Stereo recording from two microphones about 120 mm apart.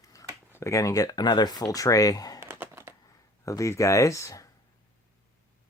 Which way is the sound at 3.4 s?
25° left (ahead or behind).